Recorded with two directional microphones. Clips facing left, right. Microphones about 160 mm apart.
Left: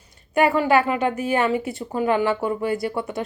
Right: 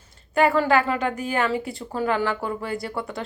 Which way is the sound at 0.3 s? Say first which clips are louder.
Left 1 dB; 15° left (ahead or behind).